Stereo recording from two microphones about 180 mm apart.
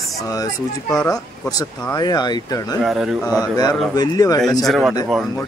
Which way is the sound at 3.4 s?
20° left (ahead or behind).